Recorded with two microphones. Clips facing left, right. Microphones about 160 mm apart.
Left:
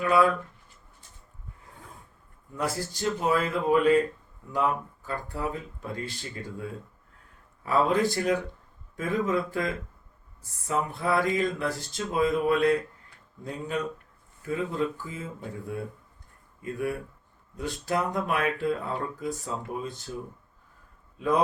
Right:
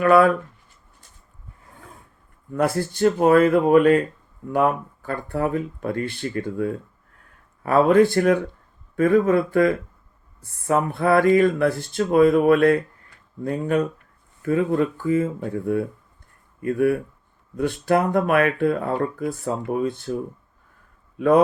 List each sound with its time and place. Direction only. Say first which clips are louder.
0.0 s speech: right 7 dB; 60° right (ahead or behind)
2.5 s speech: right 9 dB; 60° right (ahead or behind)
21.2 s speech: right 9 dB; 60° right (ahead or behind)